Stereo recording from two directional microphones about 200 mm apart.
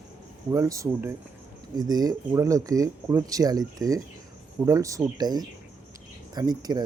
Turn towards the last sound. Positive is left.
turn(degrees=-20)  # may be behind; listen again after turning